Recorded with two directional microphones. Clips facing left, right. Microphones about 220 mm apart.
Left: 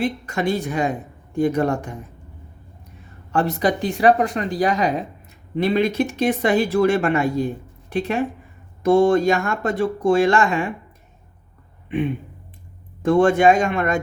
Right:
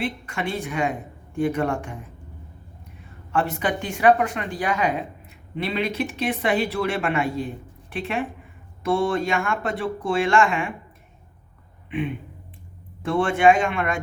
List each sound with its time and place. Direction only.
0.0 s speech: 40° left (ahead or behind)
3.3 s speech: 40° left (ahead or behind)
11.9 s a man's voice: 45° left (ahead or behind)